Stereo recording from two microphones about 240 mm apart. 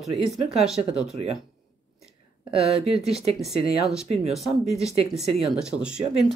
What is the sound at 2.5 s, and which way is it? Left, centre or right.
Speech, right.